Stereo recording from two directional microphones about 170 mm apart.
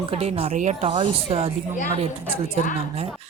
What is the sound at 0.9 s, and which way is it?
Speech, 30° right (ahead or behind).